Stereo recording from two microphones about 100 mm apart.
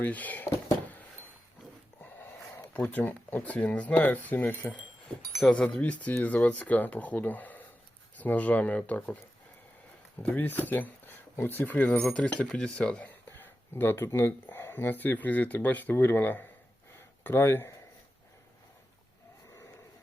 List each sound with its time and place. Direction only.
0.0 s a sound: 15° left (ahead or behind)
2.0 s dog: 15° left (ahead or behind)
2.7 s speech: 15° left (ahead or behind)
10.2 s speech: 15° left (ahead or behind)